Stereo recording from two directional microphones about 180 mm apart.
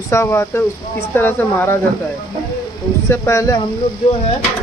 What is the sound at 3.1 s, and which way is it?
Speech, 15° left (ahead or behind).